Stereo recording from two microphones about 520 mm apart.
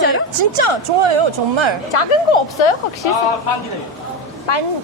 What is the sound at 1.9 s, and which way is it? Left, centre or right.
Speech, left.